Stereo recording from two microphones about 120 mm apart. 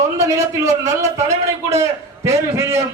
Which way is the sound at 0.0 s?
25° right (ahead or behind).